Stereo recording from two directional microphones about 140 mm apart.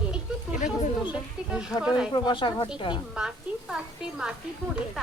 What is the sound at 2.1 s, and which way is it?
Speech, 35° left (ahead or behind).